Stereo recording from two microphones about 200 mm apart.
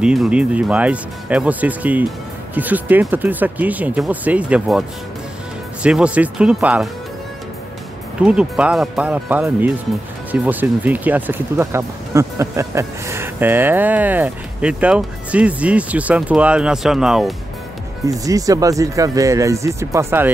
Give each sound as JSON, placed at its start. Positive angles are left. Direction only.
{"t": 0.0, "sound": "speech", "side_deg": -5}
{"t": 8.2, "sound": "speech", "side_deg": -5}
{"t": 18.0, "sound": "speech", "side_deg": -15}